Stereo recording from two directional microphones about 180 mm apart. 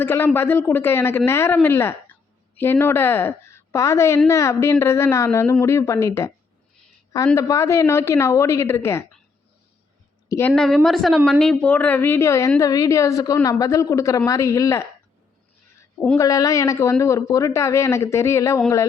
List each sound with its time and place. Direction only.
0.0 s speech: 10° left (ahead or behind)
7.3 s speech: 15° left (ahead or behind)
10.2 s a woman's voice: 15° left (ahead or behind)
10.5 s a woman's voice: centre (ahead or behind); by 14.8 s 15° left (ahead or behind)
16.1 s speech: 20° left (ahead or behind)